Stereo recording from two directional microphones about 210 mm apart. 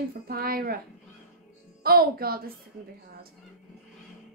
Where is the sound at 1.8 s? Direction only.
45° right (ahead or behind).